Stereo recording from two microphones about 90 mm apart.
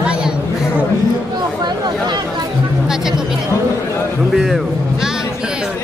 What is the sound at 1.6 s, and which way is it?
Chatter, 55° right (ahead or behind).